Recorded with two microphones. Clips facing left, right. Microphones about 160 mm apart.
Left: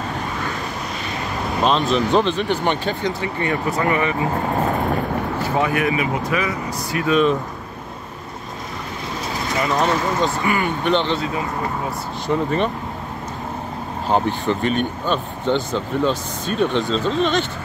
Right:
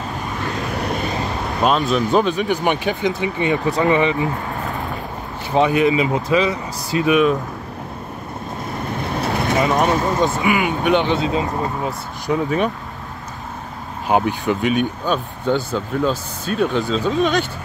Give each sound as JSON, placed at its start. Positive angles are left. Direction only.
{"t": 1.6, "sound": "speech", "side_deg": -5}
{"t": 5.6, "sound": "speech", "side_deg": -20}
{"t": 9.2, "sound": "vehicle", "side_deg": -60}
{"t": 9.6, "sound": "speech", "side_deg": -15}
{"t": 14.0, "sound": "speech", "side_deg": -10}